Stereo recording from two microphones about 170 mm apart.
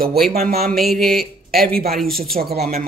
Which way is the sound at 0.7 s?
Centre (ahead or behind).